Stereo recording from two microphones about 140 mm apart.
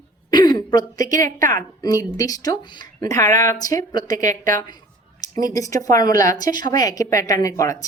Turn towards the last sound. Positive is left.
turn(degrees=20)  # may be behind; listen again after turning